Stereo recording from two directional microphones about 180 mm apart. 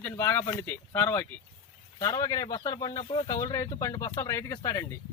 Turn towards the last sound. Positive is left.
turn(degrees=20)  # may be behind; listen again after turning